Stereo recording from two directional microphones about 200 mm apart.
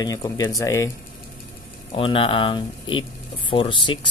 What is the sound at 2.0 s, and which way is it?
Speech, 25° left (ahead or behind).